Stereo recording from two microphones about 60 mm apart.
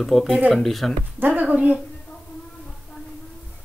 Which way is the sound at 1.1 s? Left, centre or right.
Right.